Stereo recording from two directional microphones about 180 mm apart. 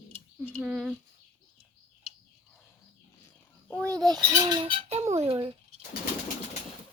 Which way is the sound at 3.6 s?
5° left (ahead or behind).